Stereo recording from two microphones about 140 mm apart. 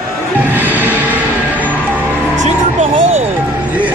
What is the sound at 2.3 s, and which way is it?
Vehicle, 55° right (ahead or behind).